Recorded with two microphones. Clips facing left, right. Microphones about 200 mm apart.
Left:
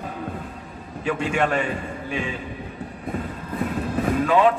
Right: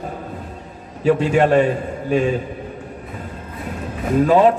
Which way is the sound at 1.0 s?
35° right (ahead or behind).